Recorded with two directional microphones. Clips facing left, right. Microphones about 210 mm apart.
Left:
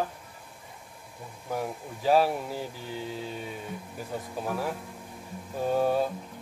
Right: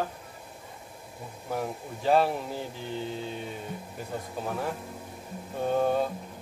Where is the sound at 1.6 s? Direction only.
5° left (ahead or behind).